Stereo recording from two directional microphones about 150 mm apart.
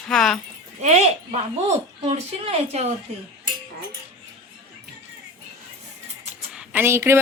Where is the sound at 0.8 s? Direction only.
45° right (ahead or behind).